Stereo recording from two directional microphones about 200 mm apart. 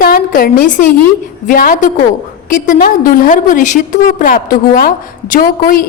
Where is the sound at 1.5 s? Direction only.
45° left (ahead or behind).